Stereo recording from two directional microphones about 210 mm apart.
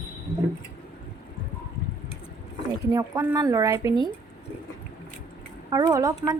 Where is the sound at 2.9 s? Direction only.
15° right (ahead or behind).